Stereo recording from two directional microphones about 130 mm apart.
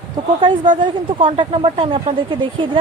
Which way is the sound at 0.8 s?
40° right (ahead or behind).